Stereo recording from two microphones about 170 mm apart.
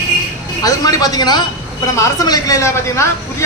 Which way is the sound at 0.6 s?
20° left (ahead or behind).